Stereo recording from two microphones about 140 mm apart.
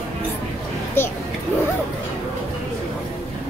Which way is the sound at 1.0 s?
15° left (ahead or behind).